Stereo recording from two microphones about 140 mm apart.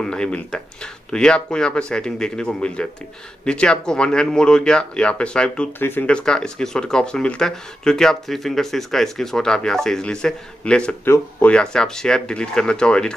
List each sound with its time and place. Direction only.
0.0 s speech: 5° left (ahead or behind)